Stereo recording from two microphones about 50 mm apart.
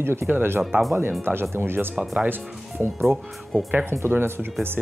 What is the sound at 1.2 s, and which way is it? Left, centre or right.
Speech, right.